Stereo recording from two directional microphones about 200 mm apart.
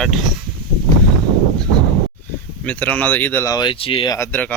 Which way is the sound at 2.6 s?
5° left (ahead or behind).